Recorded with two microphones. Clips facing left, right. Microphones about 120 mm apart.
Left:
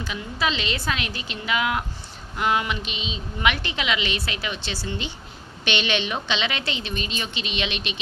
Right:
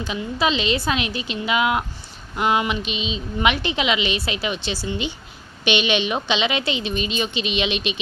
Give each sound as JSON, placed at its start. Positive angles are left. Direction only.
{"t": 0.0, "sound": "a woman's voice", "side_deg": -20}